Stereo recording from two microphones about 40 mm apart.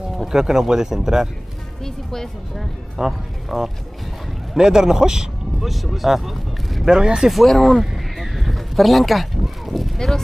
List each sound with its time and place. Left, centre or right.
0.3 s speech: centre
2.0 s speech: centre
3.1 s speech: centre
4.6 s speech: centre
5.7 s speech: centre
6.9 s speech: centre
7.2 s speech: centre
7.8 s a sound: centre
9.9 s speech: centre